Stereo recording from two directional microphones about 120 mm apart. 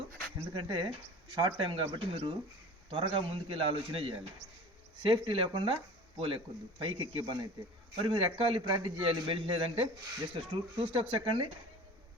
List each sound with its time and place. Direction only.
0.5 s a man's voice: 40° right (ahead or behind)